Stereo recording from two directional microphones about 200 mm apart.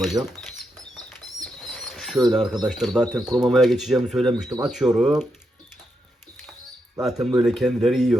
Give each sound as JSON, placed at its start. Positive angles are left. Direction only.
{"t": 0.0, "sound": "speech", "side_deg": 0}
{"t": 0.9, "sound": "bird", "side_deg": 5}
{"t": 2.6, "sound": "speech", "side_deg": 0}
{"t": 7.0, "sound": "speech", "side_deg": 0}